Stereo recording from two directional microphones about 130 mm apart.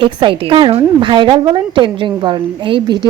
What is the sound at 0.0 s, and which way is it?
Speech, 40° right (ahead or behind).